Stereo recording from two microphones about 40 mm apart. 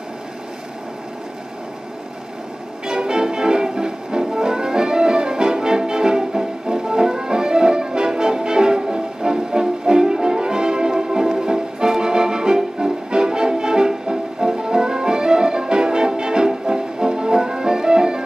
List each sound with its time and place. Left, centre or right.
2.9 s music: centre